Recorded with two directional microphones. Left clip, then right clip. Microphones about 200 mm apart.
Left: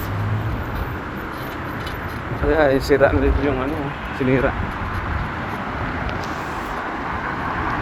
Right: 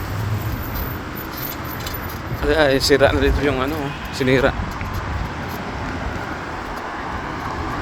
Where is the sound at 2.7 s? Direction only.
30° right (ahead or behind).